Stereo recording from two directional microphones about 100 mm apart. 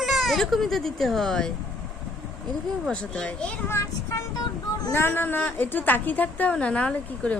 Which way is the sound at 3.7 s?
30° left (ahead or behind).